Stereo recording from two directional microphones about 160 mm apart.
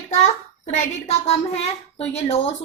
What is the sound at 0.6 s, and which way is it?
A woman's voice, 40° left (ahead or behind).